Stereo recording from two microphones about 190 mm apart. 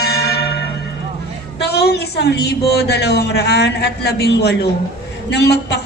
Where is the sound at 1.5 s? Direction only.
60° left (ahead or behind).